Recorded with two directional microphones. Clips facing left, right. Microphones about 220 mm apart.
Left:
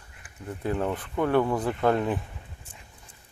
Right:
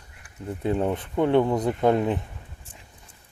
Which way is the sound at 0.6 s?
20° right (ahead or behind).